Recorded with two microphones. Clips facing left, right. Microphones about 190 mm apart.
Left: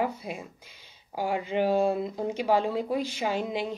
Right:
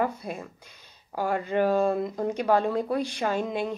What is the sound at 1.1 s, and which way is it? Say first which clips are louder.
A woman's voice: right 2 dB; 10° left (ahead or behind).